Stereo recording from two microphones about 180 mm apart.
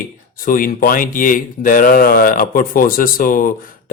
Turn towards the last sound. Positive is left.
turn(degrees=50)  # may be behind; listen again after turning